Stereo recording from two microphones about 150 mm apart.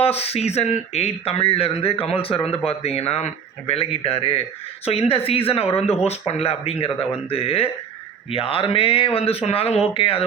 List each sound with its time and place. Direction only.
0.0 s speech: 45° left (ahead or behind)